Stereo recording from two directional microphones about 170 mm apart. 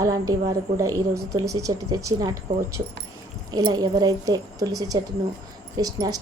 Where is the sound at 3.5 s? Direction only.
25° right (ahead or behind).